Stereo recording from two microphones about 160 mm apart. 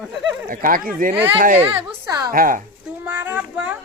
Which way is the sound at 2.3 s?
60° right (ahead or behind).